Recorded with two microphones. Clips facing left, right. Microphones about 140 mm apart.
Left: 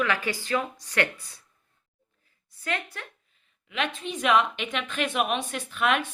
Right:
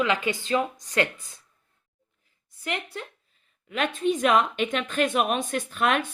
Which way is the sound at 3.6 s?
45° right (ahead or behind).